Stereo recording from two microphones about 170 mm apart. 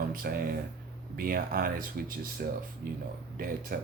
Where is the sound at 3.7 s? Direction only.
60° right (ahead or behind).